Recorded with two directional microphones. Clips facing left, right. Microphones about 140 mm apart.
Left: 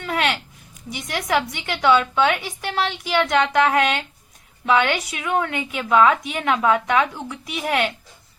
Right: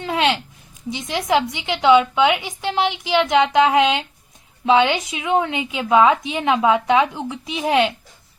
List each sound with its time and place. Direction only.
0.0 s a woman's voice: 20° right (ahead or behind)